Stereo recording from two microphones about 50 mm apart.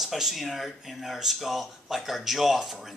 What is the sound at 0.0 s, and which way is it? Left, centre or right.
Speech, centre.